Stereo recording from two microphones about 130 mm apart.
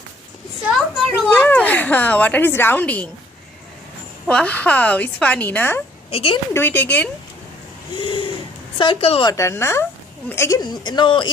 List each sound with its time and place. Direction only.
1.3 s a woman's voice: 15° left (ahead or behind)
4.3 s a woman's voice: 10° left (ahead or behind)
6.1 s a woman's voice: 45° left (ahead or behind)
6.5 s a woman's voice: 15° left (ahead or behind)
7.9 s a sound: 40° left (ahead or behind)
8.8 s a woman's voice: 45° left (ahead or behind)
9.2 s speech: 25° left (ahead or behind)
10.6 s speech: 35° left (ahead or behind)